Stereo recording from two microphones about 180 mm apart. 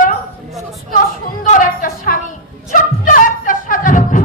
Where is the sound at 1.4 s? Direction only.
45° left (ahead or behind).